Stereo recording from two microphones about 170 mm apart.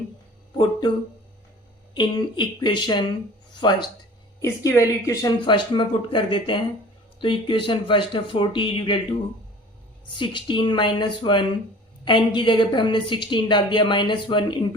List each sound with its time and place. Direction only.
0.5 s a woman's voice: 30° left (ahead or behind)
10.2 s a woman's voice: 30° left (ahead or behind)